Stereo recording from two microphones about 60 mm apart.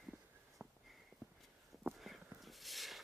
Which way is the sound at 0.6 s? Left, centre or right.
Right.